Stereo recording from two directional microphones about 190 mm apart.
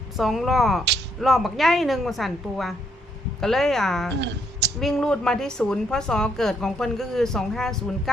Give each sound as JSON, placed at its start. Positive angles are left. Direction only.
{"t": 0.2, "sound": "a woman's voice", "side_deg": 0}
{"t": 4.2, "sound": "a sound", "side_deg": -65}
{"t": 4.8, "sound": "a woman's voice", "side_deg": 0}